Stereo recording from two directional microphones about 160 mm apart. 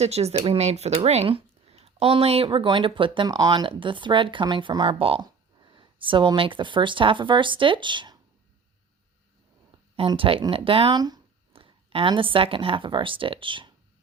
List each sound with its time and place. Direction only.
0.0 s speech: 40° right (ahead or behind)
9.9 s speech: 35° right (ahead or behind)